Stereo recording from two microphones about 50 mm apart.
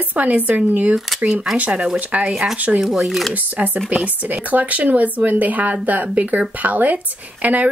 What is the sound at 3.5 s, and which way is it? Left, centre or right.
Speech, right.